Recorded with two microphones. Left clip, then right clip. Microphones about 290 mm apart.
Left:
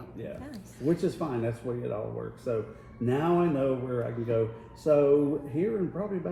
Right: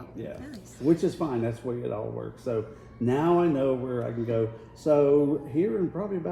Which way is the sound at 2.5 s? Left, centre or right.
Right.